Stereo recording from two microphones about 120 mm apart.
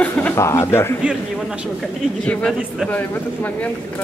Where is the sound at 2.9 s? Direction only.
15° left (ahead or behind).